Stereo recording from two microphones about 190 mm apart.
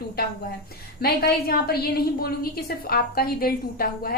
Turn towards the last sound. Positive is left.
turn(degrees=50)  # may be behind; listen again after turning